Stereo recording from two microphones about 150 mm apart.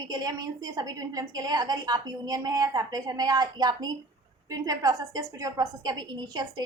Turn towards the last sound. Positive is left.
turn(degrees=-30)  # may be behind; listen again after turning